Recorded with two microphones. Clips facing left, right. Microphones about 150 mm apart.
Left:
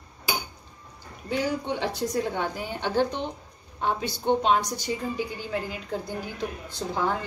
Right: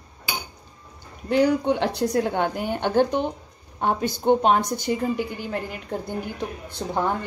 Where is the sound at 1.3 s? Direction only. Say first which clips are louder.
Right 8 dB; 65° right (ahead or behind).